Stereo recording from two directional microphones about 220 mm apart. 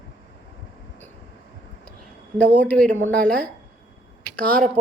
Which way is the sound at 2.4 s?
5° left (ahead or behind).